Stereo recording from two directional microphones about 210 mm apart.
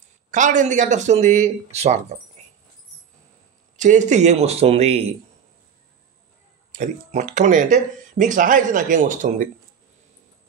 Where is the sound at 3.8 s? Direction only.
35° right (ahead or behind).